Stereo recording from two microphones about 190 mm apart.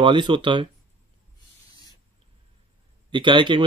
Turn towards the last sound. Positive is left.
turn(degrees=-25)  # may be behind; listen again after turning